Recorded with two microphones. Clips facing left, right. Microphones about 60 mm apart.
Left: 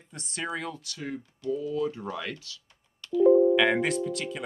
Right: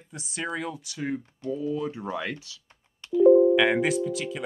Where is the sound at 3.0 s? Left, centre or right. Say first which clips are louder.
Right 2 dB; right.